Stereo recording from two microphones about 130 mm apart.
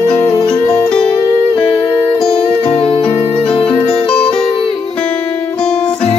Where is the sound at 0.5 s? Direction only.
5° left (ahead or behind).